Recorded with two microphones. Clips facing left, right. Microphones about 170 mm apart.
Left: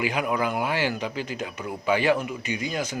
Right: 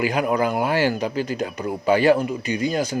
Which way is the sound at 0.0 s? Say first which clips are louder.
Right 5 dB; 40° right (ahead or behind).